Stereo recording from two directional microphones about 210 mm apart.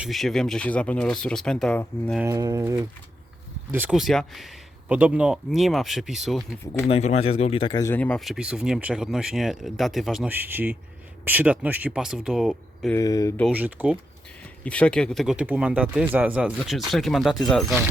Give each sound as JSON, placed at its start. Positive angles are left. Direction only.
{"t": 0.0, "sound": "speech", "side_deg": 0}
{"t": 2.1, "sound": "speech", "side_deg": -15}
{"t": 6.8, "sound": "speech", "side_deg": 30}
{"t": 13.0, "sound": "speech", "side_deg": 15}
{"t": 13.5, "sound": "speech", "side_deg": -5}
{"t": 14.6, "sound": "speech", "side_deg": 5}